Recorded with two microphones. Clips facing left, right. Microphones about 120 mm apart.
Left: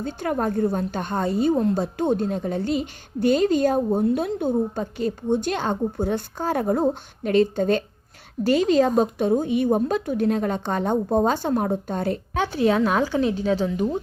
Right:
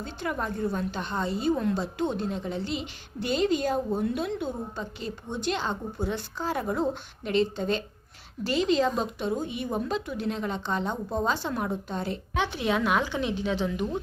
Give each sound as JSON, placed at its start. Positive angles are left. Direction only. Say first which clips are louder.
{"t": 0.0, "sound": "a woman's voice", "louder": "left 7 dB", "side_deg": 45}